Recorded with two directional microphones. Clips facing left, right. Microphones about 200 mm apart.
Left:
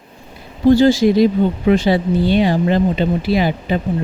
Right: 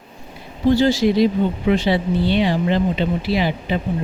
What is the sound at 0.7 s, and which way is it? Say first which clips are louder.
Speech: left 4 dB; 50° left (ahead or behind).